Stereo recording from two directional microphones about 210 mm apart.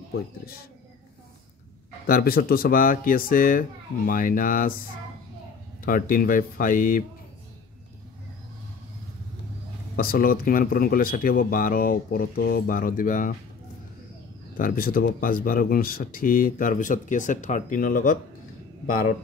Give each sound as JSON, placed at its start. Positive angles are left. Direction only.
{"t": 2.0, "sound": "speech", "side_deg": 45}
{"t": 5.9, "sound": "speech", "side_deg": 40}
{"t": 9.9, "sound": "speech", "side_deg": 45}
{"t": 14.6, "sound": "speech", "side_deg": 45}